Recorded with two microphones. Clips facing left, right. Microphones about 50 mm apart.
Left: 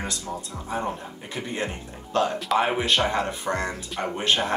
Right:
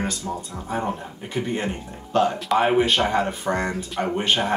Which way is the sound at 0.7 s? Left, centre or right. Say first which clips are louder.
Right 2 dB; centre.